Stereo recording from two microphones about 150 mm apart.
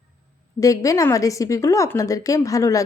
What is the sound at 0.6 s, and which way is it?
A woman's voice, 20° left (ahead or behind).